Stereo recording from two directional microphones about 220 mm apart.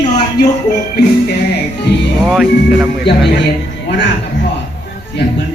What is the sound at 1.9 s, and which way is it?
Speech, 50° left (ahead or behind).